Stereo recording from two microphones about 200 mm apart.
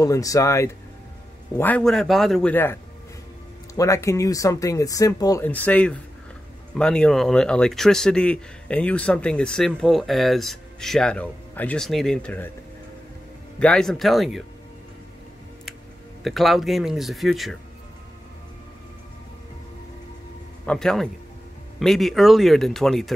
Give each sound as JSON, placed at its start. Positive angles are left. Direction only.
{"t": 0.0, "sound": "speech", "side_deg": 15}
{"t": 13.6, "sound": "speech", "side_deg": 5}
{"t": 16.3, "sound": "speech", "side_deg": 0}
{"t": 20.6, "sound": "speech", "side_deg": 5}